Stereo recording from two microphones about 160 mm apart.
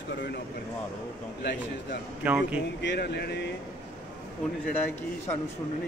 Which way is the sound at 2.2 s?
10° right (ahead or behind).